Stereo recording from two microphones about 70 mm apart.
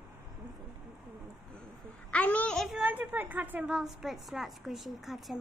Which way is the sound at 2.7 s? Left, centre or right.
Right.